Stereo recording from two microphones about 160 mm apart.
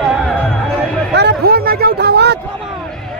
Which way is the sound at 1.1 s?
85° right.